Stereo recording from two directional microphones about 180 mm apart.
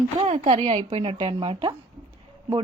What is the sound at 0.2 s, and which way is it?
A woman's voice, 35° right (ahead or behind).